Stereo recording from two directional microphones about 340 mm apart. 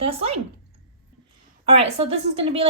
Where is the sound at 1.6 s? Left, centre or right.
Centre.